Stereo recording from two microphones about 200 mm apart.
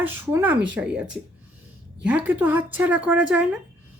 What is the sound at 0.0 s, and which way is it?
Speech, 10° right (ahead or behind).